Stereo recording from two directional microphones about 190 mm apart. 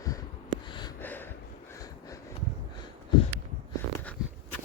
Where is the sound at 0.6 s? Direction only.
25° left (ahead or behind).